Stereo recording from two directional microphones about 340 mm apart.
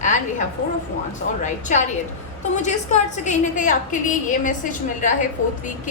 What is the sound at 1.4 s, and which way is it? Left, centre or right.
A woman's voice, left.